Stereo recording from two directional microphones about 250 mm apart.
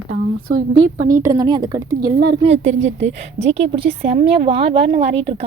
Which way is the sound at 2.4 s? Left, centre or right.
Right.